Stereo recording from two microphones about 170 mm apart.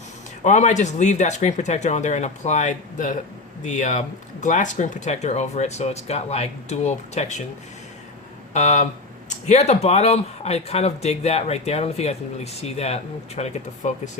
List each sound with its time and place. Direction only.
0.4 s speech: 45° left (ahead or behind)
8.5 s speech: 45° left (ahead or behind)